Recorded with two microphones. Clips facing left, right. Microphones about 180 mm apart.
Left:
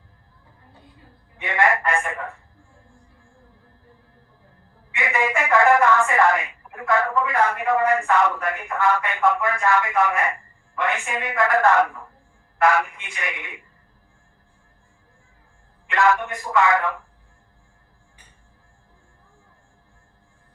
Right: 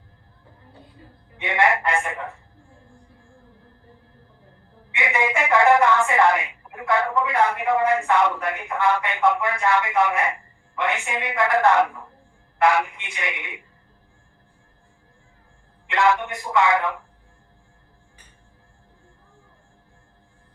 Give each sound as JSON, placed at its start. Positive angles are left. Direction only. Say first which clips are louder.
{"t": 1.4, "sound": "a woman's voice", "louder": "even", "side_deg": -20}
{"t": 4.9, "sound": "a woman's voice", "louder": "even", "side_deg": -20}
{"t": 15.9, "sound": "a woman's voice", "louder": "even", "side_deg": -20}